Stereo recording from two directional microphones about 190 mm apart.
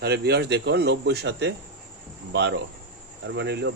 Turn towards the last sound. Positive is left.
turn(degrees=-65)  # may be behind; listen again after turning